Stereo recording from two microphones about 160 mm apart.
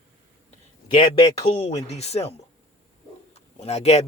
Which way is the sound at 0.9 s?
35° left (ahead or behind).